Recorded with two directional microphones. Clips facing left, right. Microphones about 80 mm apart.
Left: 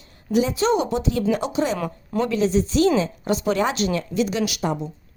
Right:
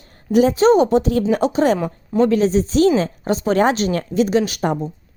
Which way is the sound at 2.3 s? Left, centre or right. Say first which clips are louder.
Right 4 dB; right.